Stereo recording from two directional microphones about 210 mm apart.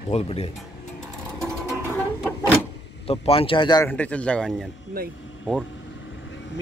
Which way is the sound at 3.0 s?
30° left (ahead or behind).